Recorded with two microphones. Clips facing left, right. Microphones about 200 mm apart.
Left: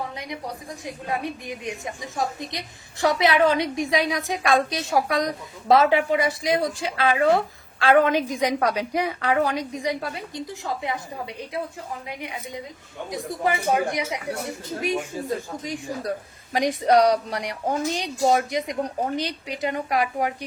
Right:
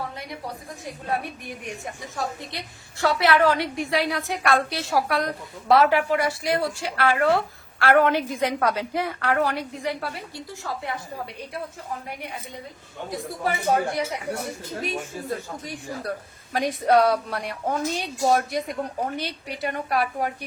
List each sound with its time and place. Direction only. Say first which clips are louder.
1.0 s a woman's voice: even; 15° left (ahead or behind)
13.4 s a woman's voice: left 1 dB; 15° left (ahead or behind)